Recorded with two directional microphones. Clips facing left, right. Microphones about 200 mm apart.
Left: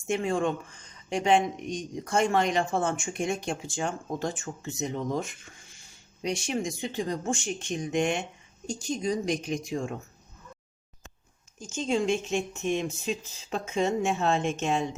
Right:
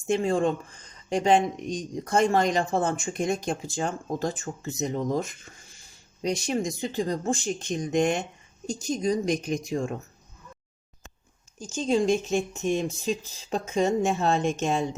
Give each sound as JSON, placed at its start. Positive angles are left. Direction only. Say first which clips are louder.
{"t": 0.1, "sound": "speech", "louder": "right 3 dB", "side_deg": -35}
{"t": 11.6, "sound": "speech", "louder": "right 3 dB", "side_deg": -35}